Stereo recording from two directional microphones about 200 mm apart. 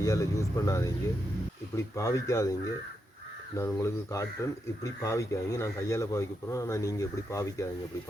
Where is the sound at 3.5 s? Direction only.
15° left (ahead or behind).